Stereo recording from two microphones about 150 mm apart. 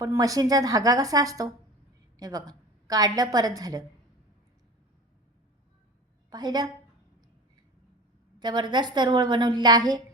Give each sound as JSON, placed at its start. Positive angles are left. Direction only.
{"t": 0.0, "sound": "a woman's voice", "side_deg": -20}
{"t": 6.3, "sound": "a woman's voice", "side_deg": -25}
{"t": 8.4, "sound": "a woman's voice", "side_deg": -30}